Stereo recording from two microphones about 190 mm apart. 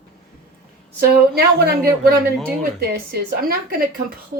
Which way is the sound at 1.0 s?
55° right (ahead or behind).